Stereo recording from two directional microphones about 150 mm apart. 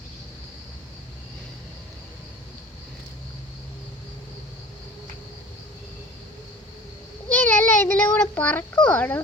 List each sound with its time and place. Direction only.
7.3 s a child's voice: 10° left (ahead or behind)